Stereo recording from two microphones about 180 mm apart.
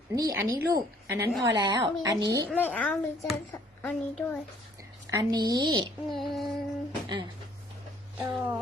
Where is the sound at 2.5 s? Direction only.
5° left (ahead or behind).